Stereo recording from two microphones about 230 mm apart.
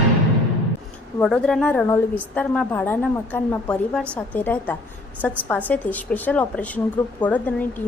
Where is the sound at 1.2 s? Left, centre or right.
Centre.